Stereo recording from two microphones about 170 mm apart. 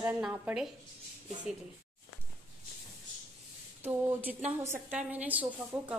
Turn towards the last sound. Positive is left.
turn(degrees=-10)  # may be behind; listen again after turning